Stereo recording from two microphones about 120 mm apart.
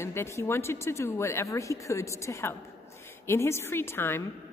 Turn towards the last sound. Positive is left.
turn(degrees=20)  # may be behind; listen again after turning